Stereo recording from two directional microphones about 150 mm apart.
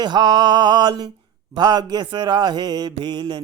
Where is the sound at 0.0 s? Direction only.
30° right (ahead or behind).